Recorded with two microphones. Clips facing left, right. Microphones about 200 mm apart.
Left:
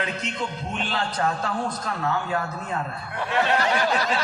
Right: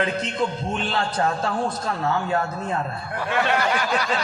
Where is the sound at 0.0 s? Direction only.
30° right (ahead or behind).